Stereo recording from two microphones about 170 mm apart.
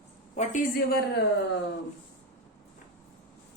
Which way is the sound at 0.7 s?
70° left (ahead or behind).